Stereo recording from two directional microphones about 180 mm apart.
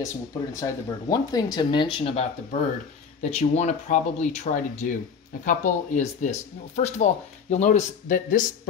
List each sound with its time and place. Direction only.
0.0 s speech: 15° left (ahead or behind); by 8.5 s 45° left (ahead or behind)